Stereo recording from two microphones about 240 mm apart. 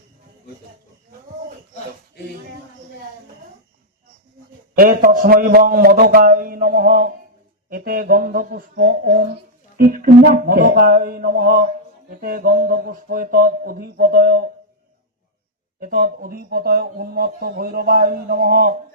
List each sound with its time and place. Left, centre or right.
4.7 s speech: right
15.8 s speech: right